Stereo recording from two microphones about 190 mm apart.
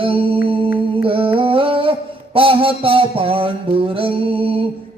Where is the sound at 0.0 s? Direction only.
30° right (ahead or behind).